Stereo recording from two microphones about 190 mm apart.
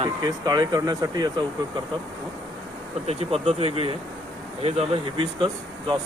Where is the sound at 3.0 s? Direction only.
35° right (ahead or behind).